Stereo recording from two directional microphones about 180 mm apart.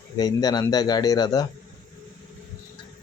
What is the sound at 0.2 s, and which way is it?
Speech, 20° left (ahead or behind).